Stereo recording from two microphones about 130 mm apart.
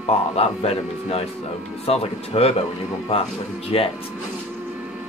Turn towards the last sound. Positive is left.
turn(degrees=50)  # may be behind; listen again after turning